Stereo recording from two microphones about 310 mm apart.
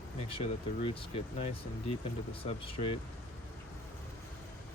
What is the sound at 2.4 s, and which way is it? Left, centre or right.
Speech, centre.